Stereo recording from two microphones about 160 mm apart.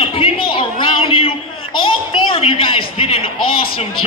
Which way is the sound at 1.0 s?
35° left (ahead or behind).